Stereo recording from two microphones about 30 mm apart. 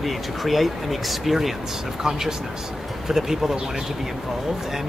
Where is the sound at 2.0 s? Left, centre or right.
Centre.